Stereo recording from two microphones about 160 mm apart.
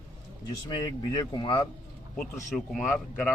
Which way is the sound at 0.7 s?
25° left (ahead or behind).